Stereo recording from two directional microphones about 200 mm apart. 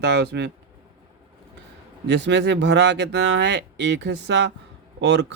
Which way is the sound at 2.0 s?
60° right (ahead or behind).